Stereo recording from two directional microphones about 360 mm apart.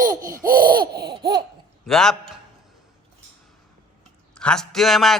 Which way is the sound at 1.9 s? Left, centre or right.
Centre.